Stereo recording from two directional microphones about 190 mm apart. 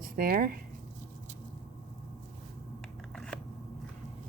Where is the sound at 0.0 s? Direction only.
50° right (ahead or behind).